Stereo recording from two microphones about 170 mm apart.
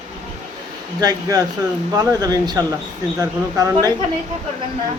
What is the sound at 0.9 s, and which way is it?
Speech, 20° right (ahead or behind).